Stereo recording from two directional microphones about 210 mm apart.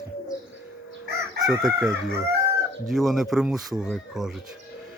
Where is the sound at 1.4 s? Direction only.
50° right (ahead or behind).